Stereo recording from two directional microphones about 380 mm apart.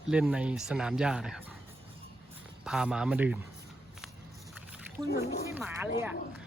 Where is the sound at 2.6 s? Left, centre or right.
Centre.